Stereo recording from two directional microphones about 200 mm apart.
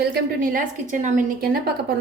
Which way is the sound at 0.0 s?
50° right (ahead or behind).